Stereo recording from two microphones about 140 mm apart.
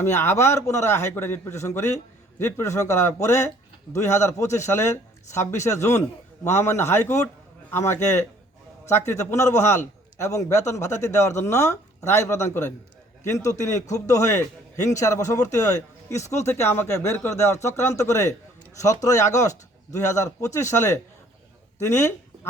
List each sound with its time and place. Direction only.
0.0 s a man's voice: 20° left (ahead or behind)